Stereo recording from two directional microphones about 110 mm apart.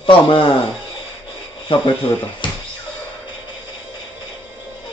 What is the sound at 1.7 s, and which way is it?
Speech, 45° left (ahead or behind).